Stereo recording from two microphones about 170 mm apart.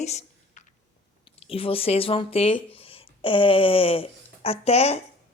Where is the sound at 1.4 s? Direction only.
35° left (ahead or behind).